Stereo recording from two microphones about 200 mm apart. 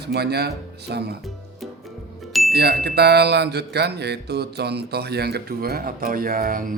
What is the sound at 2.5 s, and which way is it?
Speech, 55° right (ahead or behind).